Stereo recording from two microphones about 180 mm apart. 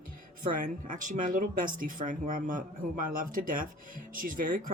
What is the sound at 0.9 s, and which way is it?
Speech, 45° right (ahead or behind).